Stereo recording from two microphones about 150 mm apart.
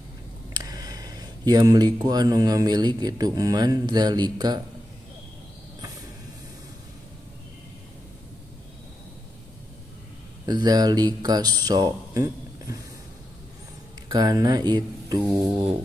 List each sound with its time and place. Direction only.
0.5 s speech: 25° right (ahead or behind)
10.4 s speech: 25° right (ahead or behind)
14.0 s speech: 25° right (ahead or behind)